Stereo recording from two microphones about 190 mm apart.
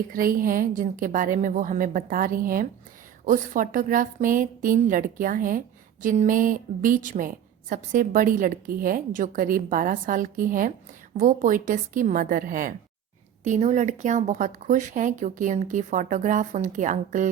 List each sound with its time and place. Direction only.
0.1 s a woman's voice: 45° right (ahead or behind)